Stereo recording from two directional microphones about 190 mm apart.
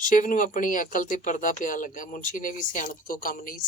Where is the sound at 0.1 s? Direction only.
45° left (ahead or behind).